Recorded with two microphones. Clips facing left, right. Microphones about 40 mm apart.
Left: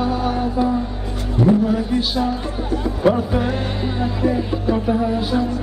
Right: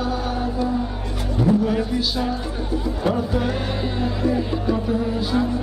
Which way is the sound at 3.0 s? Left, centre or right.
Left.